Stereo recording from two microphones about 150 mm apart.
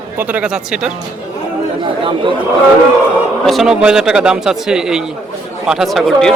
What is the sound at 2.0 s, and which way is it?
Speech, 35° right (ahead or behind).